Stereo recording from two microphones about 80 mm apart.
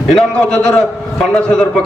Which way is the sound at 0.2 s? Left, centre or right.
Centre.